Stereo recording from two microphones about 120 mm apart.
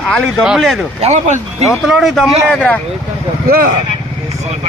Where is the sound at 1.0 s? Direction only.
70° right (ahead or behind).